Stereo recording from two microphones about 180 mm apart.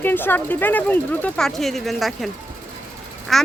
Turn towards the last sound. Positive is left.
turn(degrees=0)  # may be behind; listen again after turning